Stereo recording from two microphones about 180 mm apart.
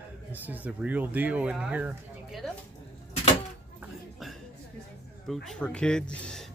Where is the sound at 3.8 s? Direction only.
Centre (ahead or behind).